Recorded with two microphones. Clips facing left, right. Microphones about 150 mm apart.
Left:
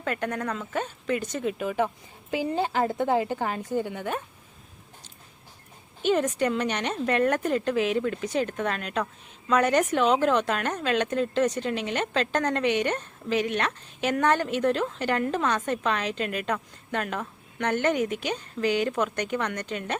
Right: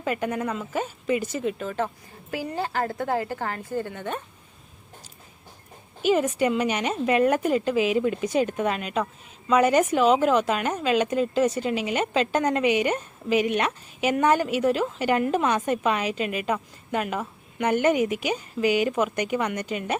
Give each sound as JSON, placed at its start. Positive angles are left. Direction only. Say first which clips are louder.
{"t": 0.0, "sound": "a woman's voice", "louder": "right 2 dB", "side_deg": -5}
{"t": 1.6, "sound": "a woman's voice", "louder": "left 2 dB", "side_deg": 15}
{"t": 6.0, "sound": "a woman's voice", "louder": "right 2 dB", "side_deg": -5}
{"t": 8.0, "sound": "a woman's voice", "louder": "right 4 dB", "side_deg": -15}